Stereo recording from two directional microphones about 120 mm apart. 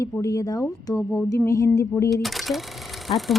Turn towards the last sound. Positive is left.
turn(degrees=0)  # may be behind; listen again after turning